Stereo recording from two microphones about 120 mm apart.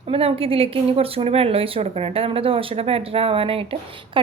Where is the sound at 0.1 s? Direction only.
55° right (ahead or behind).